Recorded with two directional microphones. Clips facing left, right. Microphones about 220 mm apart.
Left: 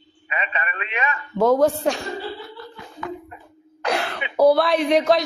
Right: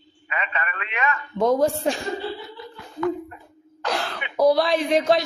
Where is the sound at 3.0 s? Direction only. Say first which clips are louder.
Right 8 dB; 20° left (ahead or behind).